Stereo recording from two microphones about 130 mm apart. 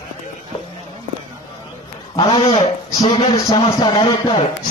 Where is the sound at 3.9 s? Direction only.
35° left (ahead or behind).